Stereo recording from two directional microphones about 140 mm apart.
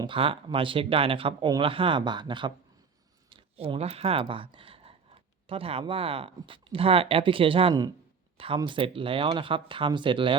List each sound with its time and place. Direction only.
0.0 s speech: 40° right (ahead or behind)
3.2 s a sound: 40° right (ahead or behind)
5.8 s speech: 40° right (ahead or behind)